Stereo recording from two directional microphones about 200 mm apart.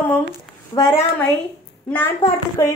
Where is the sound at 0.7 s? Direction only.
25° left (ahead or behind).